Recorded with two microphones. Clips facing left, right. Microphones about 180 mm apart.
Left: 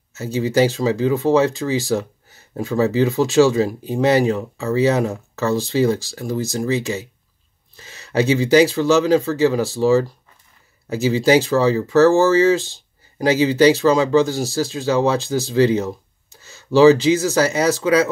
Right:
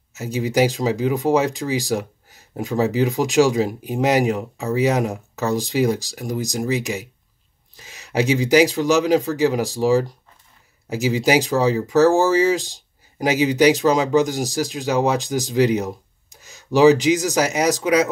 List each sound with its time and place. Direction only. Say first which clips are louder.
0.1 s speech: left 2 dB; 15° right (ahead or behind)